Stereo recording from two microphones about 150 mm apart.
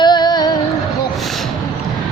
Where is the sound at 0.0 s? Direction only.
30° left (ahead or behind).